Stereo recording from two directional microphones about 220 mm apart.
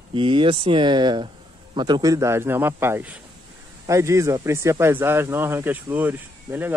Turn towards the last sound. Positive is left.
turn(degrees=-10)  # may be behind; listen again after turning